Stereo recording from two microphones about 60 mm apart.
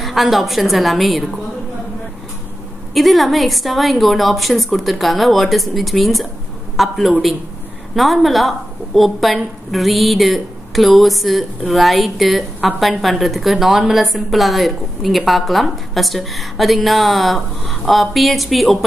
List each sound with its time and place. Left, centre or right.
0.0 s a woman's voice: centre
2.9 s a woman's voice: centre